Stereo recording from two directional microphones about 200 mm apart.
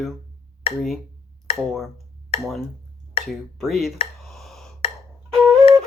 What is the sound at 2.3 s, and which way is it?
Speech, 30° left (ahead or behind).